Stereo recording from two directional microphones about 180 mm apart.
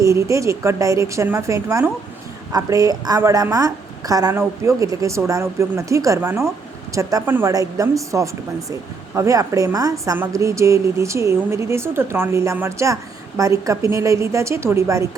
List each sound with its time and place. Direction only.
0.0 s a woman's voice: 15° right (ahead or behind)